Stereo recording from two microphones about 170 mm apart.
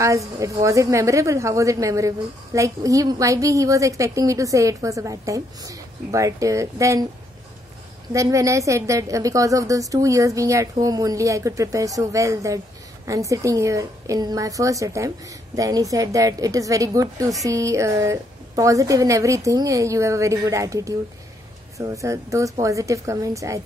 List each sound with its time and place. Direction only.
0.0 s a woman's voice: 20° right (ahead or behind)
8.1 s a woman's voice: 20° right (ahead or behind)